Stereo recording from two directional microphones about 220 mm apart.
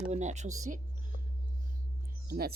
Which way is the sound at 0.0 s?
30° right (ahead or behind).